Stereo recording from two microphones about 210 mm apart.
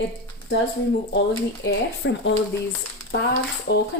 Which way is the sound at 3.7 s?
50° left (ahead or behind).